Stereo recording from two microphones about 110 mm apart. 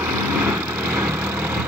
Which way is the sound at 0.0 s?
15° right (ahead or behind).